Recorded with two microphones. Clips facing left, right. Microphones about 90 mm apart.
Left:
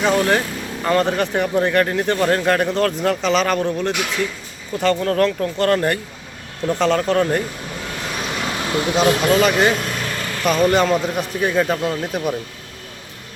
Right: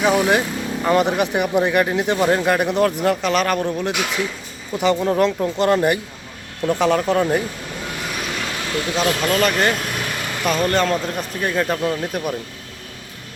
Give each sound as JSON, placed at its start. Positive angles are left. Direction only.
{"t": 0.0, "sound": "a man's voice", "side_deg": -10}
{"t": 8.4, "sound": "vehicle", "side_deg": 25}
{"t": 9.0, "sound": "speech", "side_deg": 15}
{"t": 9.4, "sound": "vehicle", "side_deg": 5}
{"t": 10.4, "sound": "a man's voice", "side_deg": 0}